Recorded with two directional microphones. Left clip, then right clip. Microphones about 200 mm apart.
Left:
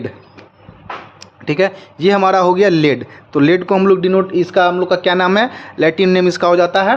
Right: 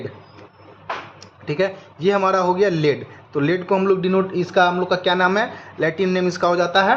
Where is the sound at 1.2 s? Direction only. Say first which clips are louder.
Left 7 dB; 55° left (ahead or behind).